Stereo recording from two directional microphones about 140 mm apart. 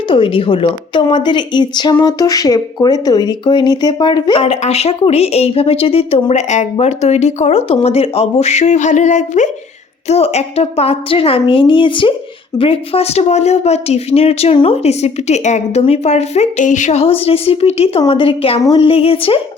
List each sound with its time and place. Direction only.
0.1 s a woman's voice: 40° left (ahead or behind)
4.4 s speech: 50° left (ahead or behind)
7.9 s a sound: 45° left (ahead or behind)
10.1 s a woman's voice: 50° left (ahead or behind)